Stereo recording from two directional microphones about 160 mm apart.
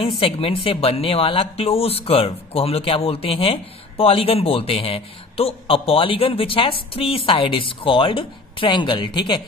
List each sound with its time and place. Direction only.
0.2 s speech: 35° left (ahead or behind)